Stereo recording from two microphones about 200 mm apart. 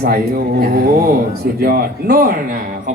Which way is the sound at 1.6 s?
50° right (ahead or behind).